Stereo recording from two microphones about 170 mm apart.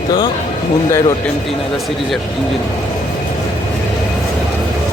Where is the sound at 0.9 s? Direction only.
15° left (ahead or behind).